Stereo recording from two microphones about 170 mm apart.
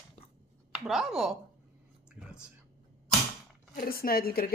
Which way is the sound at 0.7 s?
Centre (ahead or behind).